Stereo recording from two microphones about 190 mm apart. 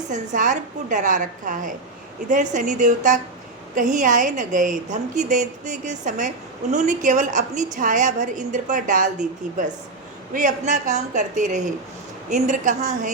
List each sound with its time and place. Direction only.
0.1 s a woman's voice: 40° right (ahead or behind)